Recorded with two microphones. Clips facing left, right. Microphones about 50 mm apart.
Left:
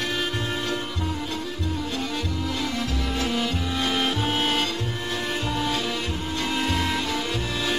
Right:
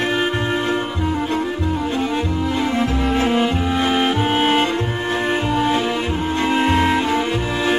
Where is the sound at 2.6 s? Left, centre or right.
Right.